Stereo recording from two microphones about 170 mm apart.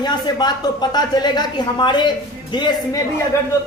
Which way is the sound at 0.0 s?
25° left (ahead or behind).